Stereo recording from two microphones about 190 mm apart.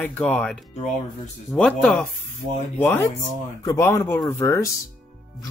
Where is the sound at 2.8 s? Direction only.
15° left (ahead or behind).